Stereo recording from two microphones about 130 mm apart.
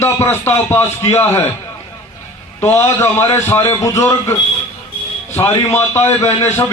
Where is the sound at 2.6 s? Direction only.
20° left (ahead or behind).